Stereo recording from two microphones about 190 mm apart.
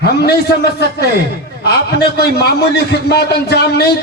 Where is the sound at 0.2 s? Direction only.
60° left (ahead or behind).